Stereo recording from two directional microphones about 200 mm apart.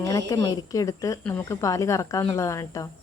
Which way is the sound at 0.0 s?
15° left (ahead or behind).